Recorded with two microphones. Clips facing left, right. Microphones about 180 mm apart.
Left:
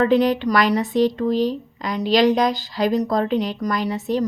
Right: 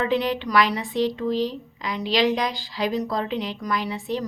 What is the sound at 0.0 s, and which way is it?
A woman's voice, 45° left (ahead or behind).